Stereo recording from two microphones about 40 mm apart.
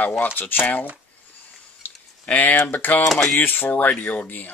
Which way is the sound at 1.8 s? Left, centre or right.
Left.